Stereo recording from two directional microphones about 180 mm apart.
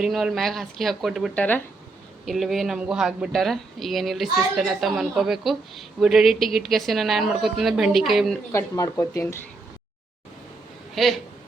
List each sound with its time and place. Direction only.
0.0 s speech: centre (ahead or behind)
8.5 s speech: 15° left (ahead or behind)
11.0 s speech: centre (ahead or behind)